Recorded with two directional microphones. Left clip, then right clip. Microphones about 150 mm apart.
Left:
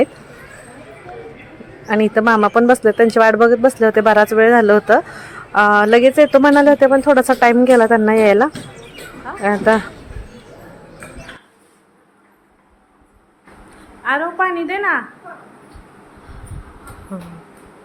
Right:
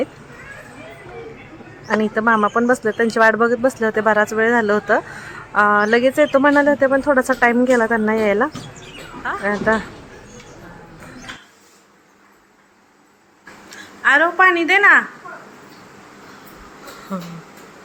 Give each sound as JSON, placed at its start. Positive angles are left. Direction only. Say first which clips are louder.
{"t": 1.9, "sound": "speech", "louder": "left 3 dB", "side_deg": 20}
{"t": 14.0, "sound": "a woman's voice", "louder": "right 5 dB", "side_deg": -5}